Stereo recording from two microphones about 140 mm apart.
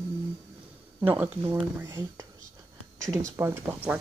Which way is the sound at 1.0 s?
15° right (ahead or behind).